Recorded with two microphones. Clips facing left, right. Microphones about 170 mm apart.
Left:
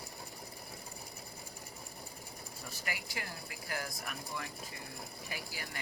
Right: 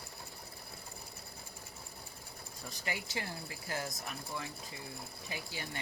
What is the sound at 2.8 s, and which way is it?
Speech, 25° right (ahead or behind).